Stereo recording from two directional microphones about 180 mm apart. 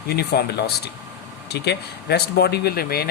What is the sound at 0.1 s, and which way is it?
Speech, 60° left (ahead or behind).